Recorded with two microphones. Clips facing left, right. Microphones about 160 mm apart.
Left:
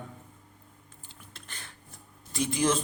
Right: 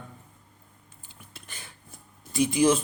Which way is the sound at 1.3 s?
10° right (ahead or behind).